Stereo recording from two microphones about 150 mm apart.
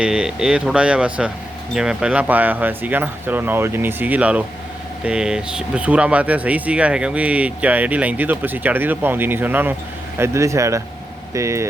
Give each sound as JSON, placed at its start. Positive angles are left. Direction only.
{"t": 0.0, "sound": "speech", "side_deg": -5}